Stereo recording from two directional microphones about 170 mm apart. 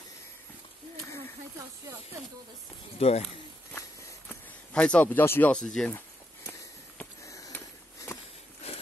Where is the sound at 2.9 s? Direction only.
35° left (ahead or behind).